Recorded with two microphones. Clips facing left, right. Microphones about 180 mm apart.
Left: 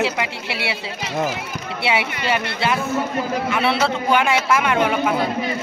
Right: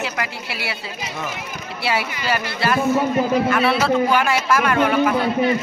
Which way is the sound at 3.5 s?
20° left (ahead or behind).